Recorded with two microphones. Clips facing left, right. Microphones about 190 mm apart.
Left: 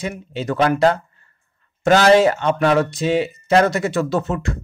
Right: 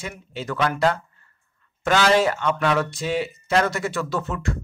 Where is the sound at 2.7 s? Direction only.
20° left (ahead or behind).